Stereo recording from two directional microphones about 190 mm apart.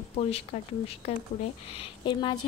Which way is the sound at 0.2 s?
30° left (ahead or behind).